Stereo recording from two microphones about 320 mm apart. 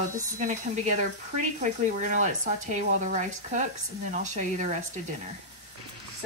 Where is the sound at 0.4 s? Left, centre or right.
Right.